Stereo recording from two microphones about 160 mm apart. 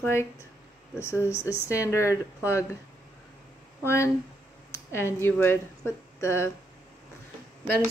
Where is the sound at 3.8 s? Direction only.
15° left (ahead or behind).